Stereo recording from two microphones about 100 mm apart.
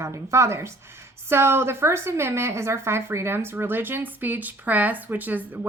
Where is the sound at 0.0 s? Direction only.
30° right (ahead or behind).